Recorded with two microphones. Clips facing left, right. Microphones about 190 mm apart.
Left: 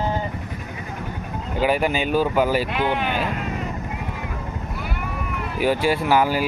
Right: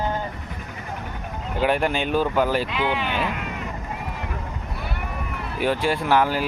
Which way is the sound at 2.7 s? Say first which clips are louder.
Left 2 dB; 50° left (ahead or behind).